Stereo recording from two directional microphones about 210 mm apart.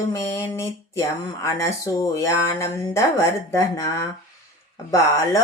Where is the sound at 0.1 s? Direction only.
15° left (ahead or behind).